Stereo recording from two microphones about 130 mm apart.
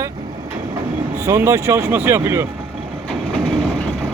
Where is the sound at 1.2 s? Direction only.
20° right (ahead or behind).